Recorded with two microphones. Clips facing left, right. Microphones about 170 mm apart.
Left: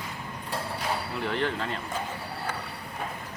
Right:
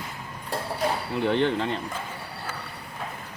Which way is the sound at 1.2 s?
25° right (ahead or behind).